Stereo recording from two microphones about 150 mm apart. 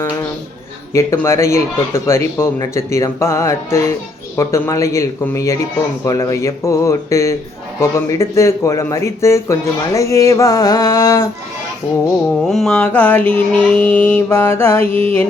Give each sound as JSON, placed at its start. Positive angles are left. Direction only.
{"t": 0.9, "sound": "speech", "side_deg": 20}
{"t": 12.4, "sound": "mantra", "side_deg": 0}
{"t": 14.8, "sound": "mantra", "side_deg": -40}